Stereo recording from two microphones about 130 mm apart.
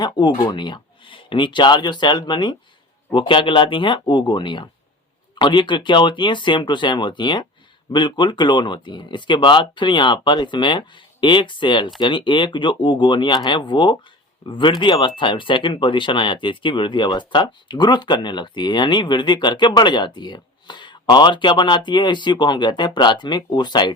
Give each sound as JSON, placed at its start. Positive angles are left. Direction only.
{"t": 0.0, "sound": "speech", "side_deg": 35}